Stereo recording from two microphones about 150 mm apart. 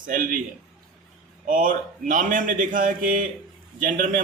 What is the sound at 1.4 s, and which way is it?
Speech, 65° right (ahead or behind).